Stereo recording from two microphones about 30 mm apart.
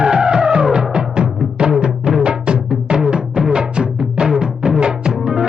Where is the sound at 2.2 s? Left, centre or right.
Right.